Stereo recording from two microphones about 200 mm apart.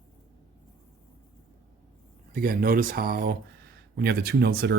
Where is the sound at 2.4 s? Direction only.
45° right (ahead or behind).